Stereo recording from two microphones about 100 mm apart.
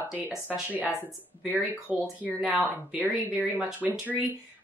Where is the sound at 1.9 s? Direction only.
15° right (ahead or behind).